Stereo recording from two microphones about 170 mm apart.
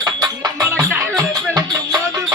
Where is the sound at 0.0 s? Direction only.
25° right (ahead or behind).